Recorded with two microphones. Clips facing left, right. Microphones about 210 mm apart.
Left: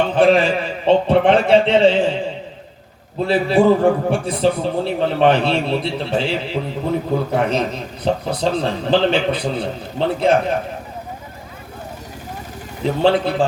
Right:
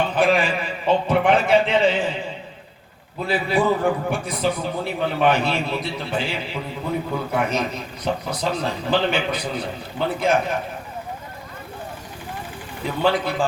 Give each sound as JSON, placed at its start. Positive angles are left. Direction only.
{"t": 0.2, "sound": "a man's voice", "side_deg": 30}
{"t": 3.2, "sound": "a man's voice", "side_deg": 30}
{"t": 12.9, "sound": "a man's voice", "side_deg": 30}